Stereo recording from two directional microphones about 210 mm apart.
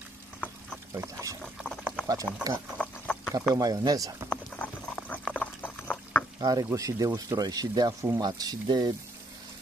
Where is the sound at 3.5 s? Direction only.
20° right (ahead or behind).